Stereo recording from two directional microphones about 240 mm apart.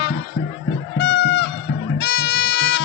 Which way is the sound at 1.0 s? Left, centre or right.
Left.